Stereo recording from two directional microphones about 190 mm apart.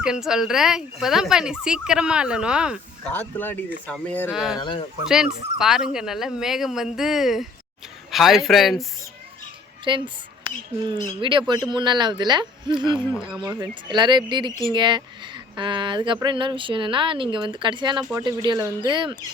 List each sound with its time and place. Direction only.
0.0 s speech: 5° right (ahead or behind)
3.1 s speech: 10° left (ahead or behind)
4.5 s speech: 25° left (ahead or behind)
5.0 s speech: 5° right (ahead or behind)
9.8 s speech: 25° right (ahead or behind)
13.0 s speech: 10° left (ahead or behind)
13.6 s speech: 25° right (ahead or behind)